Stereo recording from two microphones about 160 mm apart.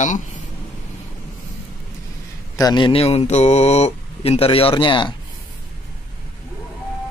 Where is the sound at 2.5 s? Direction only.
25° left (ahead or behind).